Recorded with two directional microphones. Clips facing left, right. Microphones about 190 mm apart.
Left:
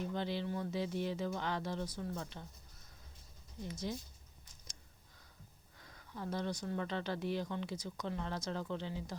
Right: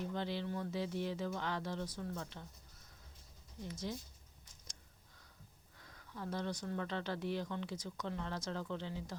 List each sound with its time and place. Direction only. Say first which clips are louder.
0.1 s speech: left 2 dB; 15° left (ahead or behind)
3.9 s speech: left 2 dB; 15° left (ahead or behind)
5.9 s speech: left 2 dB; 20° left (ahead or behind)